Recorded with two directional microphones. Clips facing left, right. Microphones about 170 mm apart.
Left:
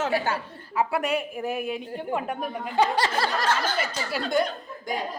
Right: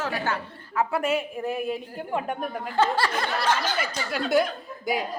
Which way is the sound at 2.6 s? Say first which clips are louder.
Even; 15° left (ahead or behind).